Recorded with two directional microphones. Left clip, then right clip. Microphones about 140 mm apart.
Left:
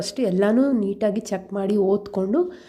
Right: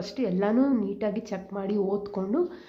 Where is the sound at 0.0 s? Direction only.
40° left (ahead or behind).